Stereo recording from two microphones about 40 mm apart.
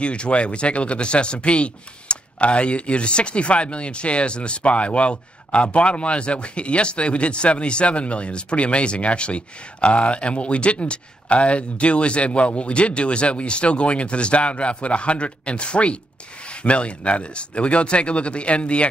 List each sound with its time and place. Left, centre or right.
0.0 s speech: left